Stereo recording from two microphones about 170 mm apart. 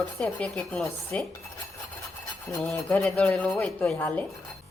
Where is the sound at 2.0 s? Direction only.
15° left (ahead or behind).